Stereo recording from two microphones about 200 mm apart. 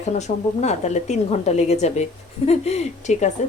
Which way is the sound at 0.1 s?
35° left (ahead or behind).